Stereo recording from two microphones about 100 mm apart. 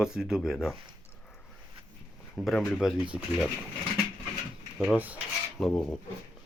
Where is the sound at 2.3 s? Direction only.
Centre (ahead or behind).